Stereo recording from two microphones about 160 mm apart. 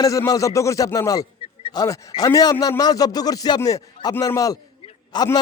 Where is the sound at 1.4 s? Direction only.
35° left (ahead or behind).